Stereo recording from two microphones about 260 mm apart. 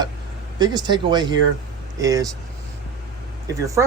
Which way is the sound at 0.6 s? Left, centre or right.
Centre.